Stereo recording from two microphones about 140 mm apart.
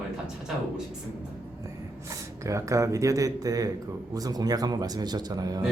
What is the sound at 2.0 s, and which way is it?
A man's voice, 20° right (ahead or behind).